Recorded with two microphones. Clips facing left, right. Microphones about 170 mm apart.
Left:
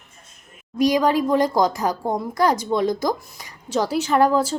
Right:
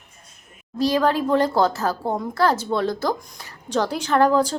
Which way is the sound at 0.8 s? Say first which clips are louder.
Left 2 dB; 15° left (ahead or behind).